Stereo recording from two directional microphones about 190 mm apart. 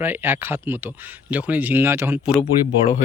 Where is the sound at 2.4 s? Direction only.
35° left (ahead or behind).